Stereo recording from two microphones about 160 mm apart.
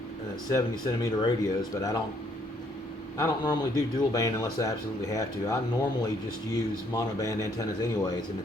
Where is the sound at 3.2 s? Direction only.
25° left (ahead or behind).